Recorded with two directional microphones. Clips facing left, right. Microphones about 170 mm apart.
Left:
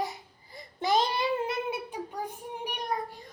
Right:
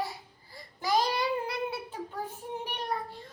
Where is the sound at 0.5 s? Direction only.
25° left (ahead or behind).